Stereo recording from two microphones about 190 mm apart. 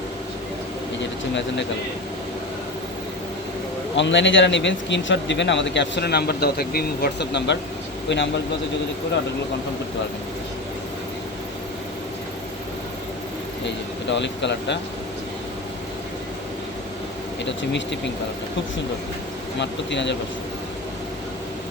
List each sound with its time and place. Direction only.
3.9 s speech: 70° left (ahead or behind)
13.7 s speech: 70° left (ahead or behind)
17.4 s speech: 70° left (ahead or behind)
19.5 s speech: 70° left (ahead or behind)